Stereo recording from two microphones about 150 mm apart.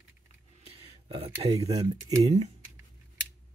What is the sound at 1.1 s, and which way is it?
Speech, 40° right (ahead or behind).